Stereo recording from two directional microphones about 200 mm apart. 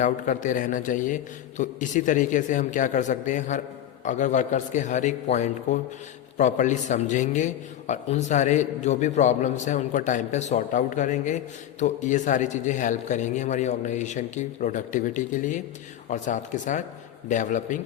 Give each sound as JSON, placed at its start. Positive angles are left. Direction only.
{"t": 0.0, "sound": "a man's voice", "side_deg": 40}